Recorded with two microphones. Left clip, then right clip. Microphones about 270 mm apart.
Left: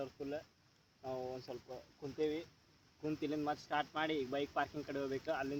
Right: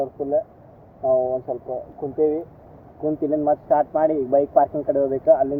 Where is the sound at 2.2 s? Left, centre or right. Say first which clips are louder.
Right 18 dB; left.